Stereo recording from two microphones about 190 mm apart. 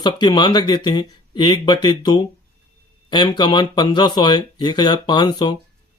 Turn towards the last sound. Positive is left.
turn(degrees=25)  # may be behind; listen again after turning